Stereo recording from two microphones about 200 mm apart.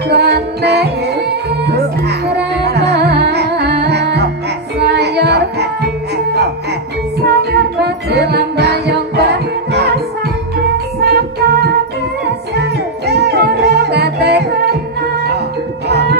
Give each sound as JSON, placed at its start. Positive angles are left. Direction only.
{"t": 0.1, "sound": "music", "side_deg": -55}
{"t": 7.2, "sound": "music", "side_deg": -55}
{"t": 11.3, "sound": "music", "side_deg": -55}
{"t": 15.9, "sound": "music", "side_deg": -55}